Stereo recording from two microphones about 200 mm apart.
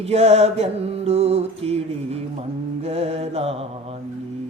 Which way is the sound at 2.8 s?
30° right (ahead or behind).